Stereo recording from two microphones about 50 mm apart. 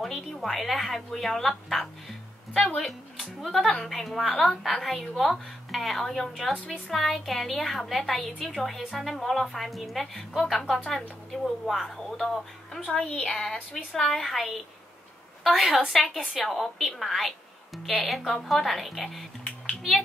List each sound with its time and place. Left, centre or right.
0.0 s a woman's voice: centre
19.4 s music: left